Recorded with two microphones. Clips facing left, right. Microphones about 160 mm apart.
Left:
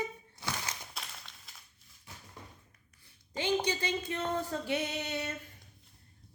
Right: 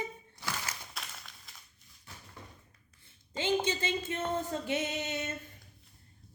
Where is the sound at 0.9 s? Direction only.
Centre (ahead or behind).